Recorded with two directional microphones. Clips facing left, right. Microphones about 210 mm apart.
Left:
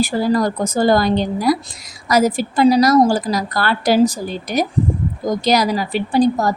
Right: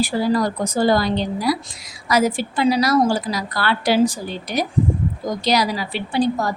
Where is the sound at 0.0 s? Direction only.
45° left (ahead or behind).